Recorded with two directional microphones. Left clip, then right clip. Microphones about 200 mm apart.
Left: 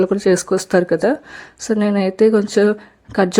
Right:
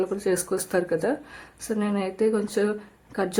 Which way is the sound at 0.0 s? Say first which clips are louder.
Left 10 dB; 35° left (ahead or behind).